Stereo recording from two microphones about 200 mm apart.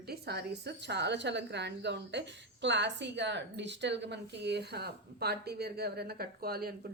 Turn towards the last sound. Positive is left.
turn(degrees=-50)  # may be behind; listen again after turning